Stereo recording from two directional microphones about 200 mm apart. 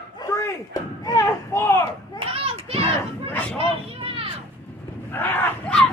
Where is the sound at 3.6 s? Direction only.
30° right (ahead or behind).